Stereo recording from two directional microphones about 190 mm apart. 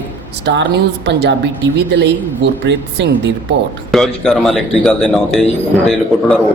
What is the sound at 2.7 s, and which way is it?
Speech, 65° right (ahead or behind).